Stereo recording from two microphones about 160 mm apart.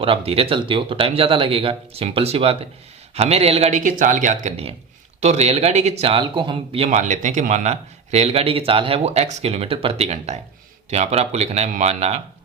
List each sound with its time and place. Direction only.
0.0 s speech: 35° right (ahead or behind)